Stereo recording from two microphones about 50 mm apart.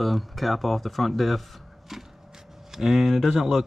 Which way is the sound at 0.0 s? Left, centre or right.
Centre.